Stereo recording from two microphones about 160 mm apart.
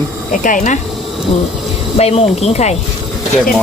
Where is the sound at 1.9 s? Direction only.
40° left (ahead or behind).